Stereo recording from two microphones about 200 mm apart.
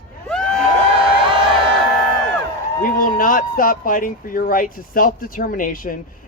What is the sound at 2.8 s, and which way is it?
Speech, 45° left (ahead or behind).